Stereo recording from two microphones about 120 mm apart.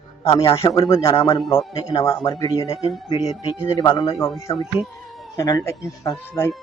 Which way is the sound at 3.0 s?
50° left (ahead or behind).